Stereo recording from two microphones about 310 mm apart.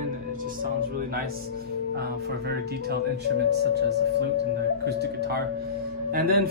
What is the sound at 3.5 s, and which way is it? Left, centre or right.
Speech, right.